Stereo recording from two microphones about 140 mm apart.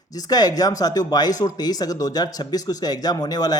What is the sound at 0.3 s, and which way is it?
Speech, 30° left (ahead or behind).